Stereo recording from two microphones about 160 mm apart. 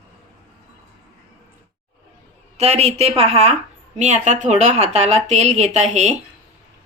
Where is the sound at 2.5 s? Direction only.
40° right (ahead or behind).